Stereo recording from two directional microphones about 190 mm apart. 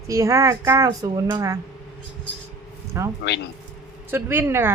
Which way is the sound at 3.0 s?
15° right (ahead or behind).